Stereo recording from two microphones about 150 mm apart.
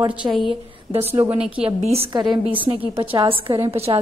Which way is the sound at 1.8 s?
45° right (ahead or behind).